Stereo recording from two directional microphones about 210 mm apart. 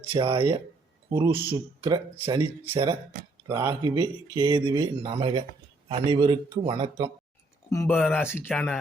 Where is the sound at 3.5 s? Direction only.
20° right (ahead or behind).